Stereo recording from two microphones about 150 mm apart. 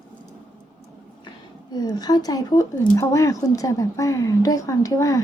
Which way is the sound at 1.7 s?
25° left (ahead or behind).